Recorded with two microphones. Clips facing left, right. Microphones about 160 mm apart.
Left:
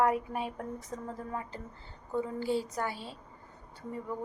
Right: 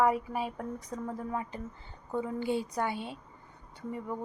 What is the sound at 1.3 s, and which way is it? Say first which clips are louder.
A woman's voice: right 3 dB; 20° right (ahead or behind).